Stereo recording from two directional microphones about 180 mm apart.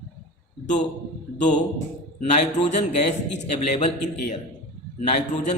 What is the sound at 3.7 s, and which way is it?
A man's voice, 40° left (ahead or behind).